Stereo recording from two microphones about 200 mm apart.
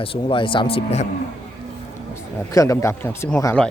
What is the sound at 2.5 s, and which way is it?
Speech, 15° left (ahead or behind).